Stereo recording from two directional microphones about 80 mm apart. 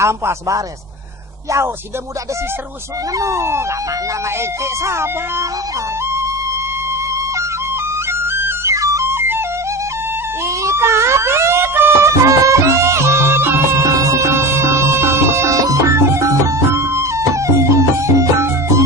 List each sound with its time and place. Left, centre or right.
0.0 s speech: right
3.2 s speech: right
4.9 s speech: right
8.3 s music: right
8.7 s music: right
10.6 s music: right
13.8 s music: right